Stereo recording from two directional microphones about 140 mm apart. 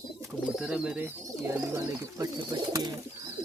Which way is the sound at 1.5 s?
25° right (ahead or behind).